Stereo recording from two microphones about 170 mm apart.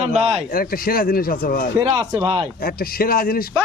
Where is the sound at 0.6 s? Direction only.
60° left (ahead or behind).